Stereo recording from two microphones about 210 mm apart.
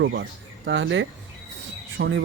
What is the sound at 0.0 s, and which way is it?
Speech, 60° right (ahead or behind).